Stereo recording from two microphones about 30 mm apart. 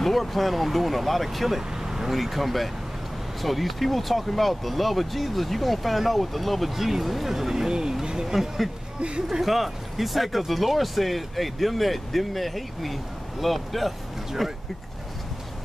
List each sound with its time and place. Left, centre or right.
0.0 s speech: centre
1.7 s vehicle: centre
2.0 s speech: centre; by 8.3 s right
8.3 s speech: centre